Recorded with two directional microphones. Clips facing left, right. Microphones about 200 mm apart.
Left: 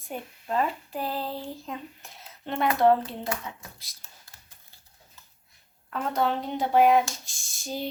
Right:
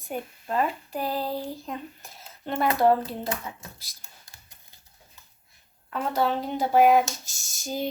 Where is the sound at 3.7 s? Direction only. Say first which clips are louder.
Right 1 dB; centre (ahead or behind).